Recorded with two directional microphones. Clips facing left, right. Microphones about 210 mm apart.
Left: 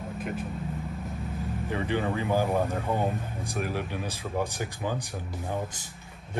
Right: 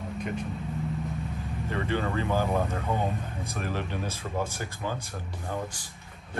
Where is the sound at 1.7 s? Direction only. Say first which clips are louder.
Left 1 dB; 15° left (ahead or behind).